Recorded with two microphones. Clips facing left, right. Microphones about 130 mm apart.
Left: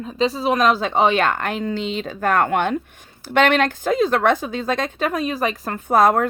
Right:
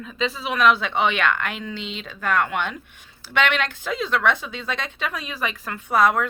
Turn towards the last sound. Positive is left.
turn(degrees=45)  # may be behind; listen again after turning